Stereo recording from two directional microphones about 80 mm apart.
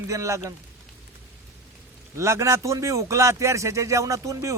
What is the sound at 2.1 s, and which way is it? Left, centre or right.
Speech, right.